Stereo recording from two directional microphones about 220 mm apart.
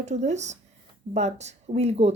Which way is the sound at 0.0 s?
30° right (ahead or behind).